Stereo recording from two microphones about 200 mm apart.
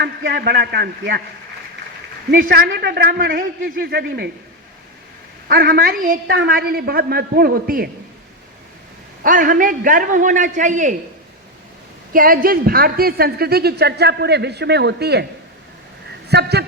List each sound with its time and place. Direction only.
0.0 s a woman's voice: 55° right (ahead or behind)
2.3 s a woman's voice: 50° right (ahead or behind)
5.5 s a woman's voice: 50° right (ahead or behind)
9.2 s a man's voice: 45° right (ahead or behind)
12.1 s a woman's voice: 45° right (ahead or behind)
16.3 s a man's voice: 55° right (ahead or behind)